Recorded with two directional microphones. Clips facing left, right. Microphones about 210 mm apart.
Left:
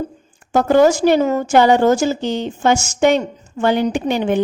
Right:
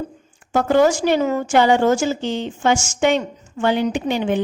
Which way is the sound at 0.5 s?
40° left (ahead or behind).